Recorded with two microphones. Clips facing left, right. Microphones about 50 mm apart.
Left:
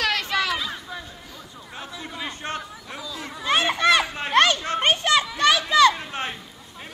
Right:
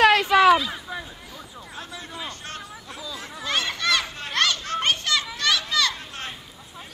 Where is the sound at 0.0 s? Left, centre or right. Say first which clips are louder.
Right 8 dB; right.